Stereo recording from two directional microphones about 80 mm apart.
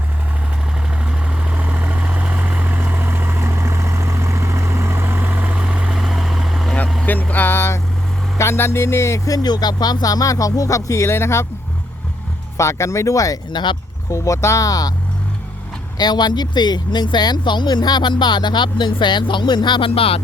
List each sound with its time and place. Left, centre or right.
1.0 s vehicle: centre
7.0 s vehicle: left
8.4 s speech: left
12.5 s speech: left
13.5 s speech: left
14.1 s speech: left
16.0 s speech: left